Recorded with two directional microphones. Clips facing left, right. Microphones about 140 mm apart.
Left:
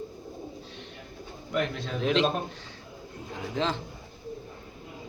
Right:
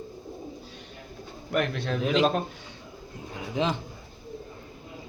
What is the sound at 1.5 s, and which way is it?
Speech, 70° right (ahead or behind).